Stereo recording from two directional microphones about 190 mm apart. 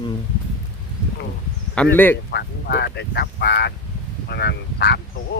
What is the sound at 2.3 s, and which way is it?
Speech, 60° left (ahead or behind).